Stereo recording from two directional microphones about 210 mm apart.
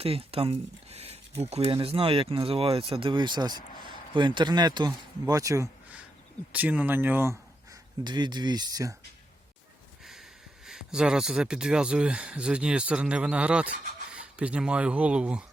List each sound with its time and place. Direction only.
0.0 s speech: 25° right (ahead or behind)
10.0 s sniff: centre (ahead or behind)
10.7 s speech: 5° right (ahead or behind)